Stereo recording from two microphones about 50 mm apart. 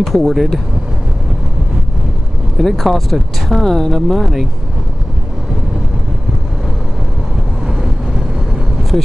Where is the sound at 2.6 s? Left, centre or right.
Centre.